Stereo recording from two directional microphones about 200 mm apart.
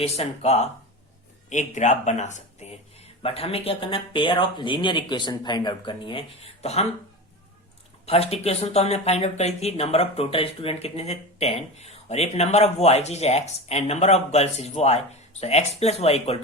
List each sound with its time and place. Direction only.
0.0 s speech: 30° left (ahead or behind)
8.0 s speech: 30° left (ahead or behind)